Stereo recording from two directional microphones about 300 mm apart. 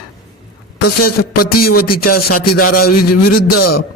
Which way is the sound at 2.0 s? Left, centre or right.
Left.